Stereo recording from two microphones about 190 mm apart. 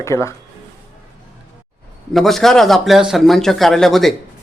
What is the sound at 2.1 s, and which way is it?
Speech, centre (ahead or behind).